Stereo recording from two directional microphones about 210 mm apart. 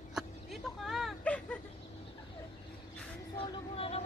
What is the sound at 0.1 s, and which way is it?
Vehicle, centre (ahead or behind).